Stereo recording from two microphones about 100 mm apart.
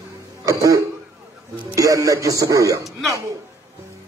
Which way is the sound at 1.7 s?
35° right (ahead or behind).